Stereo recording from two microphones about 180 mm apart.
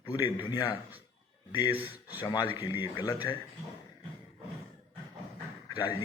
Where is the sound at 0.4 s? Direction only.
25° left (ahead or behind).